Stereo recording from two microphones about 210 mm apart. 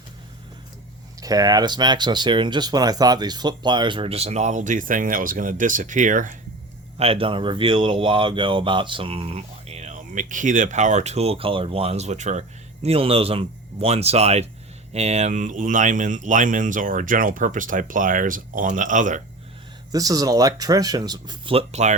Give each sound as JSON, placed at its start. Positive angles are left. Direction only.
{"t": 1.2, "sound": "speech", "side_deg": -15}
{"t": 7.0, "sound": "speech", "side_deg": -25}
{"t": 19.9, "sound": "speech", "side_deg": -15}